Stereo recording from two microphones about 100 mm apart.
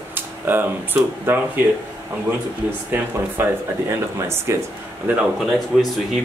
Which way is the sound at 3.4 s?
20° right (ahead or behind).